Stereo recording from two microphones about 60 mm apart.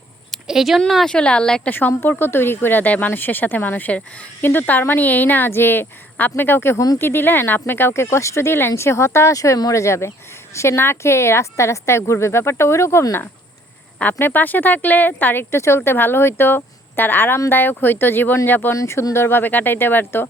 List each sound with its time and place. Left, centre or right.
0.4 s speech: centre
1.0 s speech: centre
2.0 s speech: left
6.7 s speech: left
7.0 s speech: left
14.0 s speech: left
15.5 s speech: left
18.7 s speech: left
19.1 s speech: left